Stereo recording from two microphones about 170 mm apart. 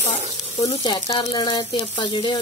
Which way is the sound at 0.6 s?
25° left (ahead or behind).